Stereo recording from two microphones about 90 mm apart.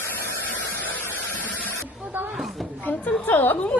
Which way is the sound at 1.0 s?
20° left (ahead or behind).